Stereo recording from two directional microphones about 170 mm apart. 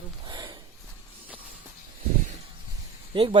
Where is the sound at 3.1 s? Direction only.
30° right (ahead or behind).